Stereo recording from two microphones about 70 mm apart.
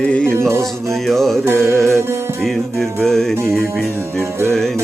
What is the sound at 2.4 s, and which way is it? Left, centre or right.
Music, centre.